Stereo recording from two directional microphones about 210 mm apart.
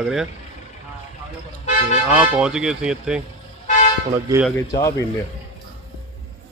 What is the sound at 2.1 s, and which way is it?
Speech, 5° right (ahead or behind).